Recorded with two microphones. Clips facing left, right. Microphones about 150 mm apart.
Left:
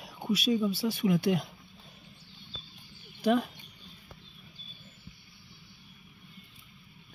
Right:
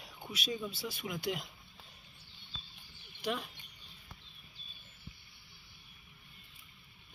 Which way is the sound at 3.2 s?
50° left (ahead or behind).